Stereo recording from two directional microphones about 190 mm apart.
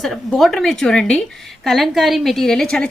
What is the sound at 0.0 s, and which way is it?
A woman's voice, centre (ahead or behind).